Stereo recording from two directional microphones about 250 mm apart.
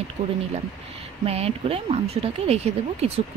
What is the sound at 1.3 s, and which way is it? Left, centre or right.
Speech, right.